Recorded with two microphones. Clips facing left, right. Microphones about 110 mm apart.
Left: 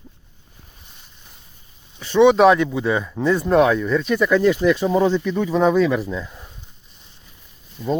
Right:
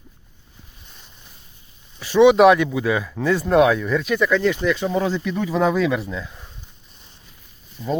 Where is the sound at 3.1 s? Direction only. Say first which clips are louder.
Left 1 dB; 25° left (ahead or behind).